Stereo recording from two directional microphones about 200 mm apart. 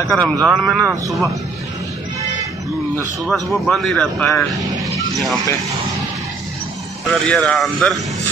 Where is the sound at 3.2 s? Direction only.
Centre (ahead or behind).